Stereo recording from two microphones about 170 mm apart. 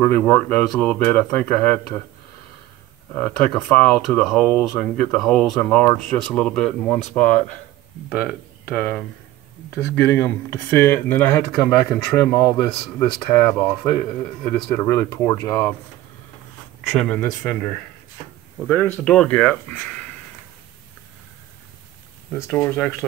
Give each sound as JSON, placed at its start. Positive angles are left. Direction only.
{"t": 0.0, "sound": "speech", "side_deg": 15}
{"t": 3.1, "sound": "speech", "side_deg": 10}
{"t": 10.0, "sound": "speech", "side_deg": 15}
{"t": 16.9, "sound": "speech", "side_deg": 5}
{"t": 18.7, "sound": "speech", "side_deg": 10}
{"t": 22.5, "sound": "speech", "side_deg": 10}